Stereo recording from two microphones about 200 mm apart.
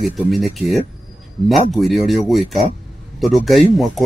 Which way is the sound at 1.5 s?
Centre (ahead or behind).